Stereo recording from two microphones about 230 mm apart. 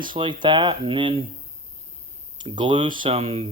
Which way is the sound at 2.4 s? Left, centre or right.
Right.